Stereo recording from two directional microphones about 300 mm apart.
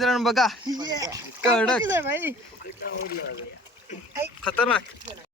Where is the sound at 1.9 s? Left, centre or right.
Centre.